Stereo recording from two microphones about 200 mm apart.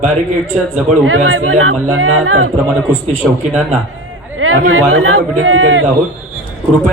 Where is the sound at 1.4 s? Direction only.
90° right.